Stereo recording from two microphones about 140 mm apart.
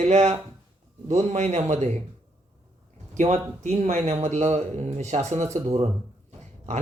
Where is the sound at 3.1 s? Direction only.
55° right (ahead or behind).